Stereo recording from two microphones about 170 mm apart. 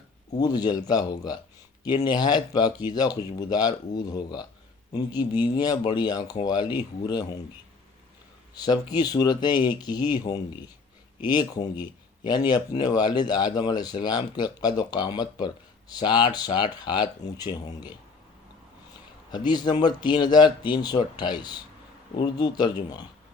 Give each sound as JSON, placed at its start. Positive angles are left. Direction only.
{"t": 0.3, "sound": "speech", "side_deg": 25}
{"t": 8.5, "sound": "speech", "side_deg": 25}
{"t": 19.5, "sound": "speech", "side_deg": 25}